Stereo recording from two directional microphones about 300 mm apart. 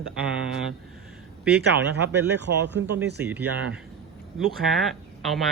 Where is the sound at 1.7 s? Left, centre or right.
Right.